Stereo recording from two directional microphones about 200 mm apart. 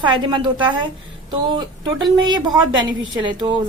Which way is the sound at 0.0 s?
25° right (ahead or behind).